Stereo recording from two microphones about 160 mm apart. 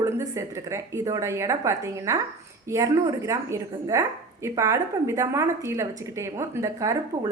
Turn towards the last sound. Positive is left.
turn(degrees=-20)  # may be behind; listen again after turning